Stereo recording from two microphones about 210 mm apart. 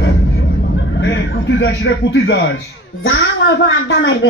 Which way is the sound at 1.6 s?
60° left (ahead or behind).